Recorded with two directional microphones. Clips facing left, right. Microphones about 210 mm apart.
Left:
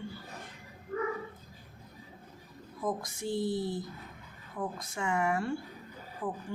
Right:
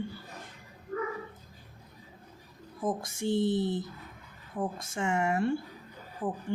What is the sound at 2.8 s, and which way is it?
Speech, 25° right (ahead or behind).